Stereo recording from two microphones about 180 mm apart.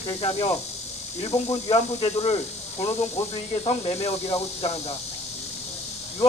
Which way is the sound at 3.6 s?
30° left (ahead or behind).